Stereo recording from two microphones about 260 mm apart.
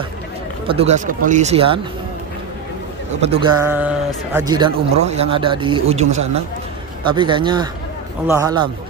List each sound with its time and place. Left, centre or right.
0.7 s speech: right
3.2 s speech: right
3.6 s a man's voice: centre